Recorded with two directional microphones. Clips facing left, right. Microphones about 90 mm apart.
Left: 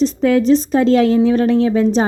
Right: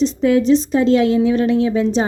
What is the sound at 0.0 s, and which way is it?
A woman's voice, 45° left (ahead or behind).